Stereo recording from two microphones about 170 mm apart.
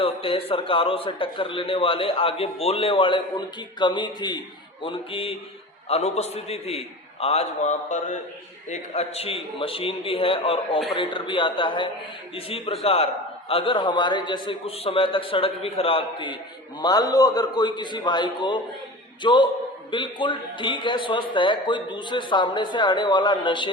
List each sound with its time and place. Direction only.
0.0 s a man's voice: 35° left (ahead or behind)